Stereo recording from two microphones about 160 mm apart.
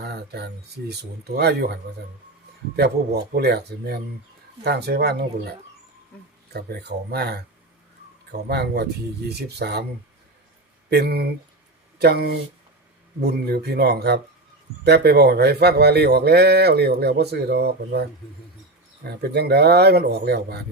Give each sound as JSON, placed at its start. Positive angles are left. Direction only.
{"t": 0.0, "sound": "speech", "side_deg": -90}
{"t": 3.3, "sound": "speech", "side_deg": -90}
{"t": 10.8, "sound": "speech", "side_deg": -85}
{"t": 19.0, "sound": "speech", "side_deg": -90}